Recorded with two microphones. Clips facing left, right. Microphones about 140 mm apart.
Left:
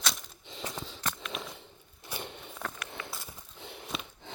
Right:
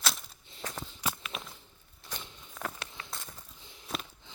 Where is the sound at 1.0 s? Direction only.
5° right (ahead or behind).